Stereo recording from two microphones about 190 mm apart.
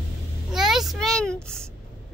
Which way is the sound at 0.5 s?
Centre (ahead or behind).